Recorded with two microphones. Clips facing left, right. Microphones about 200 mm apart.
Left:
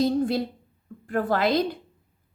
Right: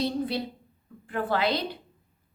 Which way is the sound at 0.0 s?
45° left (ahead or behind).